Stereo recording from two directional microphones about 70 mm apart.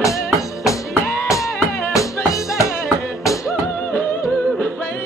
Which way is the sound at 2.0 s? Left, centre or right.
Left.